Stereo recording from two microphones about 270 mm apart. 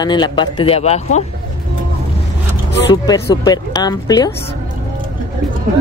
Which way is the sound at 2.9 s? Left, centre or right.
Centre.